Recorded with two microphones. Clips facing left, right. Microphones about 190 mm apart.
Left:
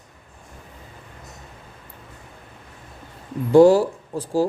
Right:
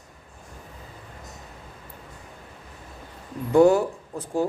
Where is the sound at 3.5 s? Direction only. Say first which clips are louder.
Left 4 dB; 30° left (ahead or behind).